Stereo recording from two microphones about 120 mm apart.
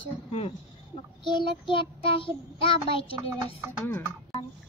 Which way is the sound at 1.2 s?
40° left (ahead or behind).